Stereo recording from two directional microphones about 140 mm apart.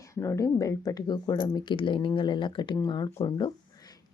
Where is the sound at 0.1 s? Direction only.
20° left (ahead or behind).